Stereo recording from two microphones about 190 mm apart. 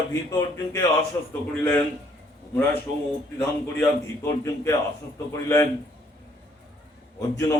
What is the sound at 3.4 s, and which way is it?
Speech, 15° left (ahead or behind).